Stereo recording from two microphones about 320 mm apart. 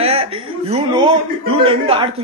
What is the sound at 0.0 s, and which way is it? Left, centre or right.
A woman's voice, centre.